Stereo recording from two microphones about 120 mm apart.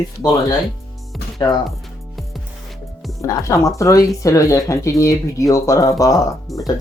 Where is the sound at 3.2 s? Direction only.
25° left (ahead or behind).